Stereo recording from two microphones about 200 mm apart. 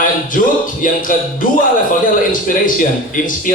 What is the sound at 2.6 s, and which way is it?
Speech, 45° left (ahead or behind).